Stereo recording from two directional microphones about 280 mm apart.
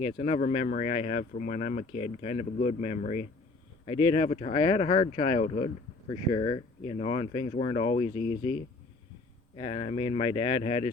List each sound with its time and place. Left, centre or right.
0.0 s speech: left
9.6 s speech: centre